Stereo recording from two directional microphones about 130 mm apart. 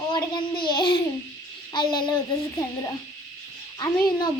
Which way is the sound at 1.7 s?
35° left (ahead or behind).